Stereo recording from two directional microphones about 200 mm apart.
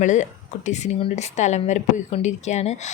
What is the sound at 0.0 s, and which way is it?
Speech, 35° left (ahead or behind).